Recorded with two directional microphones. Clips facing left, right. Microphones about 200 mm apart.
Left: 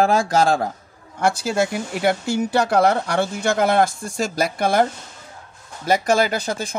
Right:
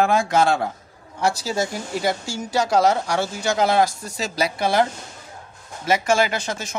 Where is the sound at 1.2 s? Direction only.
55° left (ahead or behind).